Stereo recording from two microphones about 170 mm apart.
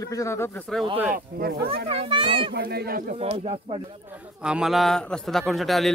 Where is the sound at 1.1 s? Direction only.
65° right (ahead or behind).